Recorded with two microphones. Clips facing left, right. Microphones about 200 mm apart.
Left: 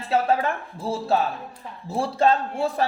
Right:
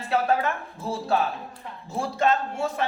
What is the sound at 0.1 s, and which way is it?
Speech, 30° left (ahead or behind).